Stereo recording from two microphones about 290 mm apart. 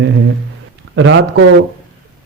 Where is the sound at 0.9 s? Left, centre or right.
Right.